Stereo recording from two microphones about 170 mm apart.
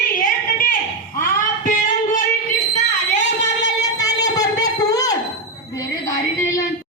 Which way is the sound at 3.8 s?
20° left (ahead or behind).